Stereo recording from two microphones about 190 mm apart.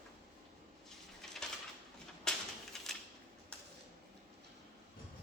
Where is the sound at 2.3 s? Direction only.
5° left (ahead or behind).